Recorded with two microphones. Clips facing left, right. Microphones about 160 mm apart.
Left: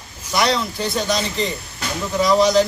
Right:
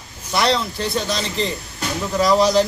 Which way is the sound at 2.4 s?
30° right (ahead or behind).